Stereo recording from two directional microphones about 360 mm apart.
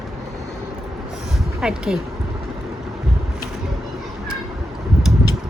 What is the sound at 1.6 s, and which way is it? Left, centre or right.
Speech, centre.